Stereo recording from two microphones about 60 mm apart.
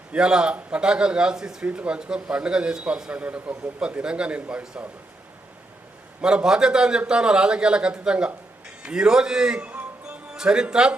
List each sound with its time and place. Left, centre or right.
0.1 s a man's voice: centre
3.8 s a man's voice: centre
6.2 s a man's voice: centre
9.6 s music: right
10.3 s a man's voice: centre